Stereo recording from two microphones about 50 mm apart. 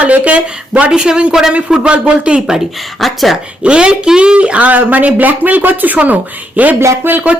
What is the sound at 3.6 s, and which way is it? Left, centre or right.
A woman's voice, right.